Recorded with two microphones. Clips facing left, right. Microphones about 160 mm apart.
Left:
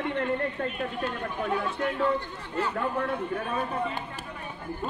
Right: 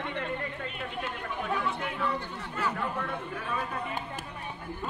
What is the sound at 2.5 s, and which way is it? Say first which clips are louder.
A man's voice: left 4 dB; 40° left (ahead or behind).